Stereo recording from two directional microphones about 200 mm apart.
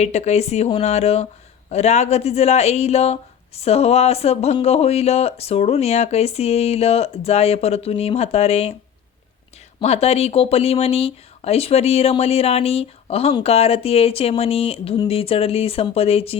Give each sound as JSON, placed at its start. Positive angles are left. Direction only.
{"t": 0.0, "sound": "speech", "side_deg": 35}
{"t": 9.8, "sound": "speech", "side_deg": 30}